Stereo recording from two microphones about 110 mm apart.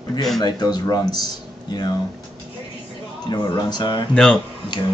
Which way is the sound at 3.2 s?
40° left (ahead or behind).